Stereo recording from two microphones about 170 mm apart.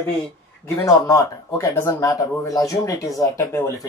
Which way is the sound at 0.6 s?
20° left (ahead or behind).